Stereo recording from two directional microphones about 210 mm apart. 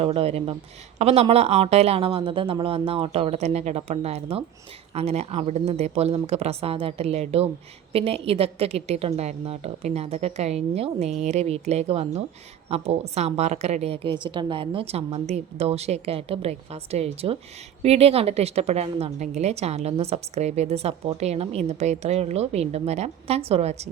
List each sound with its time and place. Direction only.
0.0 s a woman's voice: 25° right (ahead or behind)